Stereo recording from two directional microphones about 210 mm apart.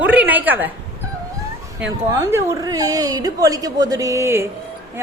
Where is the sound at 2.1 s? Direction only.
15° right (ahead or behind).